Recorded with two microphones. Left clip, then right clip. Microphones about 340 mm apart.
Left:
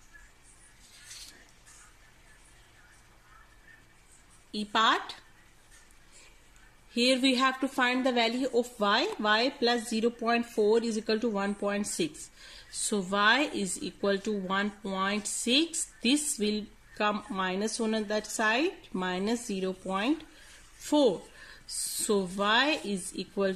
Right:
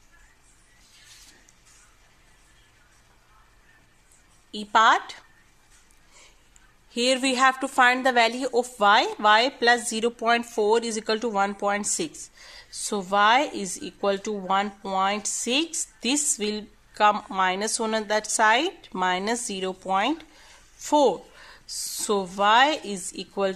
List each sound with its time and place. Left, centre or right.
4.5 s a woman's voice: centre
6.9 s a woman's voice: centre